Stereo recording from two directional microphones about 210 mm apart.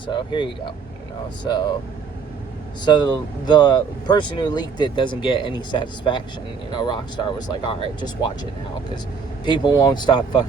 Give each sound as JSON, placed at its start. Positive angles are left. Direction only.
{"t": 0.1, "sound": "speech", "side_deg": 20}
{"t": 2.8, "sound": "speech", "side_deg": 20}
{"t": 9.4, "sound": "speech", "side_deg": 20}